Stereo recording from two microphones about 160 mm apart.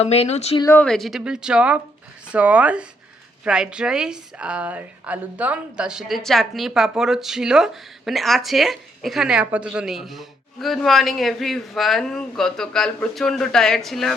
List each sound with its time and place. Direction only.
0.0 s speech: 40° left (ahead or behind)
0.6 s speech: 15° left (ahead or behind)
0.9 s a woman's voice: centre (ahead or behind)